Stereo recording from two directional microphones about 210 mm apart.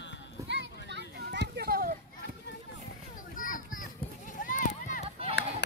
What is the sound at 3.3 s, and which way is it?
Children playing, 40° left (ahead or behind).